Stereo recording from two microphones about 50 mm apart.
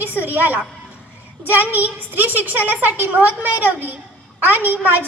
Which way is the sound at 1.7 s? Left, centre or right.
Right.